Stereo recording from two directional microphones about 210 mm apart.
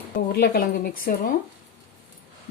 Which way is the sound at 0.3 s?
45° left (ahead or behind).